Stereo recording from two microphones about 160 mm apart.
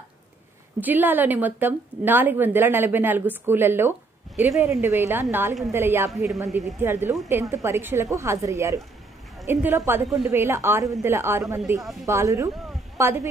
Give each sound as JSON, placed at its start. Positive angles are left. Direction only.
{"t": 0.7, "sound": "speech", "side_deg": -10}
{"t": 10.0, "sound": "a woman's voice", "side_deg": 0}
{"t": 10.3, "sound": "a woman's voice", "side_deg": -15}